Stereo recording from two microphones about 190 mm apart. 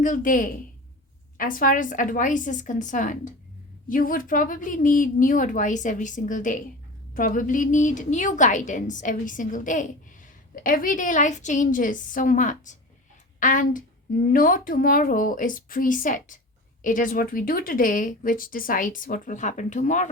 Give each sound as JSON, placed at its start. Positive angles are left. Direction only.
{"t": 0.0, "sound": "a woman's voice", "side_deg": 45}